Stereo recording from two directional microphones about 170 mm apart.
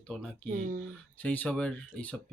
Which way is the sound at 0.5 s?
50° right (ahead or behind).